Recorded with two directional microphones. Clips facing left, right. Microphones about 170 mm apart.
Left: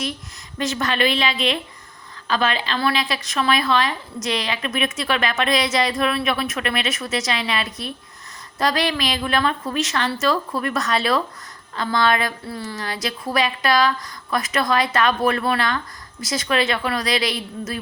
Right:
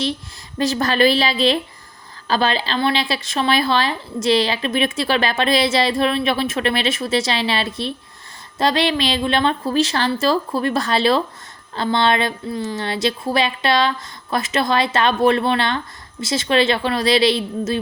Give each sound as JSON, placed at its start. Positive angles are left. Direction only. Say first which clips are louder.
{"t": 0.6, "sound": "a woman's voice", "louder": "right 5 dB", "side_deg": -35}